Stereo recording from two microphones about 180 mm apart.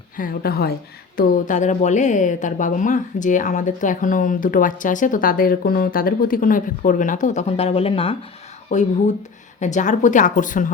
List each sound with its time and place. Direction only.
0.2 s speech: 60° left (ahead or behind)